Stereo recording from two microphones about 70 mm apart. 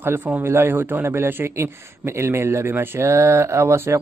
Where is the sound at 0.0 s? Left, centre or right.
Right.